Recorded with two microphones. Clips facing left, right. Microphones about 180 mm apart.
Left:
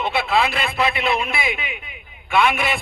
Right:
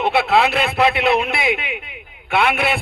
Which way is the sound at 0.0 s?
65° right (ahead or behind).